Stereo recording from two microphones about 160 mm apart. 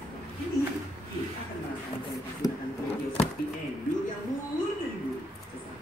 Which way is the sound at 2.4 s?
25° left (ahead or behind).